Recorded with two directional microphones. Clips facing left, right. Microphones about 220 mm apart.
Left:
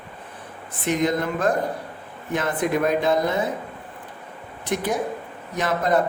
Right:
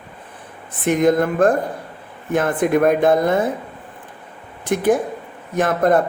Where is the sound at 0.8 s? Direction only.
50° right (ahead or behind).